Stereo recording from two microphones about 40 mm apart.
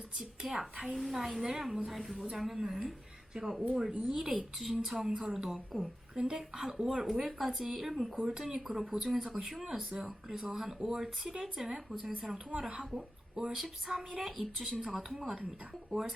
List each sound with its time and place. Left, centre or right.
0.2 s speech: centre